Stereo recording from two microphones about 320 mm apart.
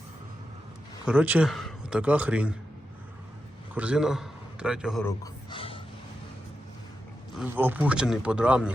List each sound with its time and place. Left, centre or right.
1.0 s a man's voice: centre
3.8 s a man's voice: centre
5.2 s a sound: centre
7.3 s speech: centre